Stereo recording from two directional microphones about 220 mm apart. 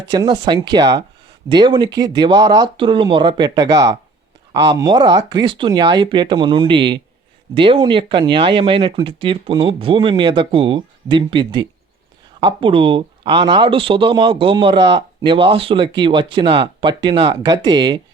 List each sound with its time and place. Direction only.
0.1 s speech: 20° right (ahead or behind)